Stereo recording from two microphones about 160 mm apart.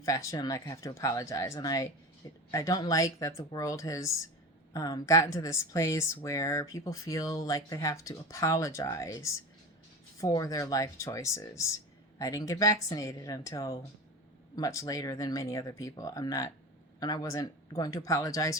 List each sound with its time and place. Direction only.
0.0 s speech: 20° left (ahead or behind)